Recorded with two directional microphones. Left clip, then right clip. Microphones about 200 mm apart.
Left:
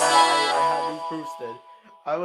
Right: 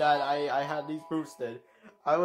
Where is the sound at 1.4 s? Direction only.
15° left (ahead or behind).